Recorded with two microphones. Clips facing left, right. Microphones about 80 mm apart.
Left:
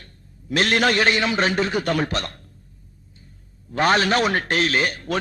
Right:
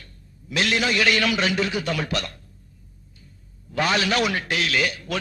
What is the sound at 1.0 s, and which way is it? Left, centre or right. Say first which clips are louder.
A man's voice: left 1 dB; left.